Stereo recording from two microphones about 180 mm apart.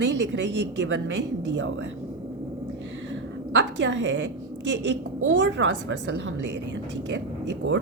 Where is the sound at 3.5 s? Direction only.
90° right.